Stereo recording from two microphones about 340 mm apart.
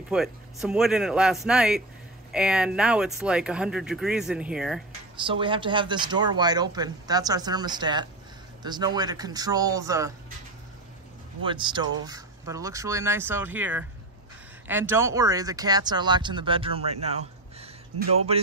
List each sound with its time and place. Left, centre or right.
0.1 s speech: centre
5.2 s speech: centre
11.4 s speech: centre